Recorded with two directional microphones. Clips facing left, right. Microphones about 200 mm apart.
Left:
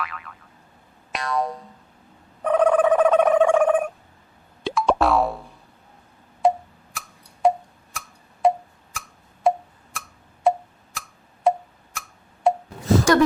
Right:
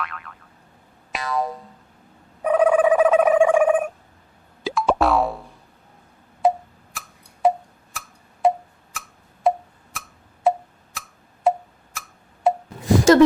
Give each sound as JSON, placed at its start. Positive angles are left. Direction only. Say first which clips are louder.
{"t": 0.0, "sound": "boing", "louder": "even", "side_deg": 0}
{"t": 2.4, "sound": "a sound", "louder": "right 1 dB", "side_deg": -5}
{"t": 4.6, "sound": "boing", "louder": "even", "side_deg": 0}
{"t": 6.4, "sound": "tick-tock", "louder": "even", "side_deg": 0}
{"t": 6.9, "sound": "tick", "louder": "left 1 dB", "side_deg": 0}
{"t": 12.8, "sound": "a sound", "louder": "right 3 dB", "side_deg": -15}